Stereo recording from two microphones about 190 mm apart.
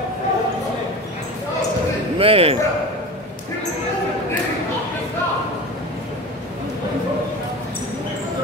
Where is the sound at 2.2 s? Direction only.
30° right (ahead or behind).